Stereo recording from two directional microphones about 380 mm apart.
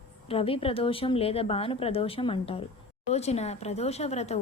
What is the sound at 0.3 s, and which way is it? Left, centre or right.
Speech, centre.